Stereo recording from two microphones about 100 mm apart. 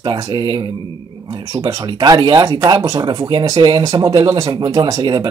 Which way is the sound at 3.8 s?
35° right (ahead or behind).